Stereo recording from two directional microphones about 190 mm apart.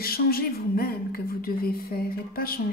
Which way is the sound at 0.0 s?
50° left (ahead or behind).